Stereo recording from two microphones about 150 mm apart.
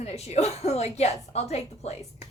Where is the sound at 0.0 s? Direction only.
45° left (ahead or behind).